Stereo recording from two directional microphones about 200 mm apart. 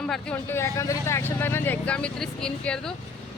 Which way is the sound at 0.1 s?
10° left (ahead or behind).